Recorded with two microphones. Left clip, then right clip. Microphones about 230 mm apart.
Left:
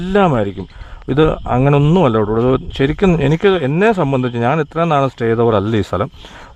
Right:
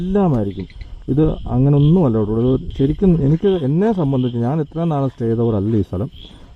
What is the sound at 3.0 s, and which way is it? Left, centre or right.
A man's voice, left.